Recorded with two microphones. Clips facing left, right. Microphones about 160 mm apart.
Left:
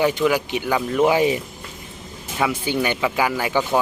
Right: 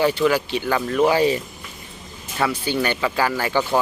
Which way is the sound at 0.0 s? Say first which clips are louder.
Even; 15° left (ahead or behind).